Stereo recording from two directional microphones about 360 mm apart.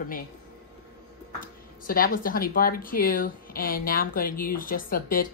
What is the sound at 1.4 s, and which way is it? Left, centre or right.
Speech, left.